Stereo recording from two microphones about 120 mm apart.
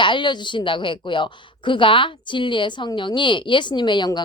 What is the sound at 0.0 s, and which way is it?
A woman's voice, 40° left (ahead or behind).